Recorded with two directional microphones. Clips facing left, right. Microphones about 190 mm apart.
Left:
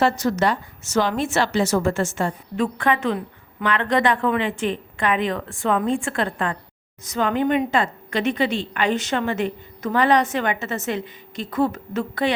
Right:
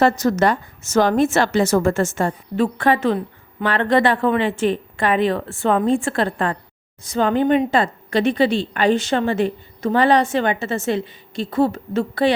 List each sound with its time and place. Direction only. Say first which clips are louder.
0.0 s a woman's voice: right 3 dB; 45° right (ahead or behind)